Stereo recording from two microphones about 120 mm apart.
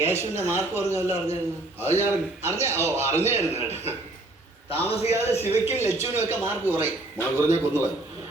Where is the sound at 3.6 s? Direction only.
60° left (ahead or behind).